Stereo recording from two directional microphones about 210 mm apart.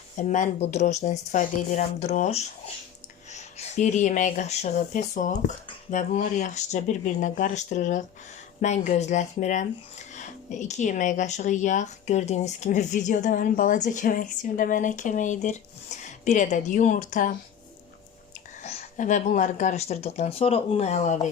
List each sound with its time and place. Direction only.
0.2 s speech: 35° left (ahead or behind)
18.6 s speech: 35° left (ahead or behind)